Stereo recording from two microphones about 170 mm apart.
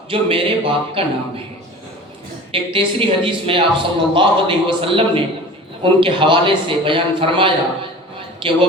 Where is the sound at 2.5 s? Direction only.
30° right (ahead or behind).